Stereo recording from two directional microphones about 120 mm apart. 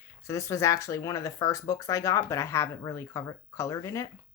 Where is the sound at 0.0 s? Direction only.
25° left (ahead or behind).